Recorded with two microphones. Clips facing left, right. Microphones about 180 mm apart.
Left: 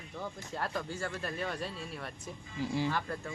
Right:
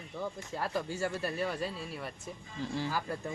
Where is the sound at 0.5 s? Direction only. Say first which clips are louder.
Right 2 dB; 5° right (ahead or behind).